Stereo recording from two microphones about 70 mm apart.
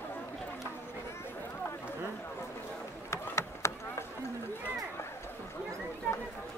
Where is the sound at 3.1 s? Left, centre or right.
Left.